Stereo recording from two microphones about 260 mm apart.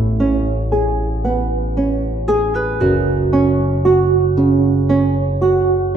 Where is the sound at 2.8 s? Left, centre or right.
Centre.